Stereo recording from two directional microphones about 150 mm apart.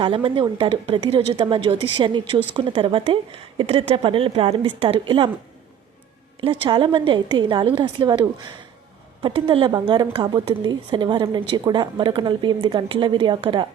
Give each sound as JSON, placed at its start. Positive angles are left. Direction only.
{"t": 0.0, "sound": "a woman's voice", "side_deg": -35}
{"t": 6.7, "sound": "a woman's voice", "side_deg": -35}